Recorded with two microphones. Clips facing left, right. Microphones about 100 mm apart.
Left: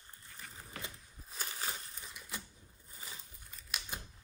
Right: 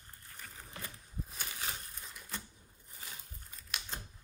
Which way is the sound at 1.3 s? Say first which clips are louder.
Left 3 dB; 35° left (ahead or behind).